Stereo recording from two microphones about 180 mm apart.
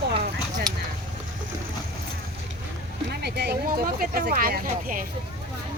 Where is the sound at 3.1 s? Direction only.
65° right (ahead or behind).